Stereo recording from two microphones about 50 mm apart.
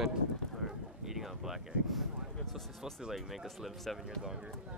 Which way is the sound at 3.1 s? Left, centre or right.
Centre.